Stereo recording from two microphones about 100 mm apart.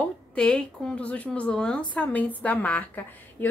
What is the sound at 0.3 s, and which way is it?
A woman's voice, 10° left (ahead or behind).